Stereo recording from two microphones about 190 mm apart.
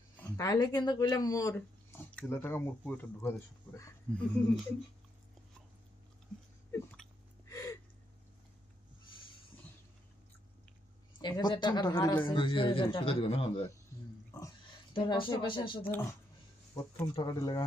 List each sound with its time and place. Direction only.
0.2 s speech: 20° left (ahead or behind)
7.4 s a sound: 15° left (ahead or behind)
11.2 s a man's voice: 20° left (ahead or behind)
14.9 s a man's voice: 25° left (ahead or behind)
15.8 s speech: 10° left (ahead or behind)
17.2 s a man's voice: 20° left (ahead or behind)